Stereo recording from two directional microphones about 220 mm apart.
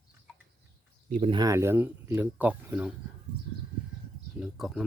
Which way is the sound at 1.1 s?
35° right (ahead or behind).